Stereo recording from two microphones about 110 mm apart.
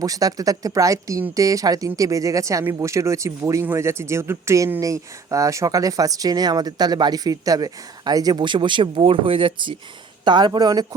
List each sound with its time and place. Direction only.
0.0 s speech: 35° right (ahead or behind)